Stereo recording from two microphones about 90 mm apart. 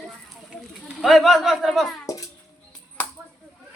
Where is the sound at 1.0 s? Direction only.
Centre (ahead or behind).